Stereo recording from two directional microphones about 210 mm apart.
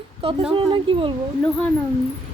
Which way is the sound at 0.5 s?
25° right (ahead or behind).